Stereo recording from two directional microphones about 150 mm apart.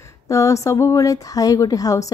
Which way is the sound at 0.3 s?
20° left (ahead or behind).